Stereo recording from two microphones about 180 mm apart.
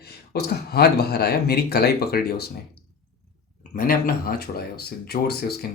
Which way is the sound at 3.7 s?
50° left (ahead or behind).